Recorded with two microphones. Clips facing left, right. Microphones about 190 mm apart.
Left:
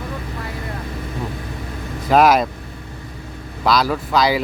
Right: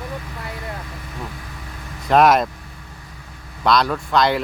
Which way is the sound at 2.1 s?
Centre (ahead or behind).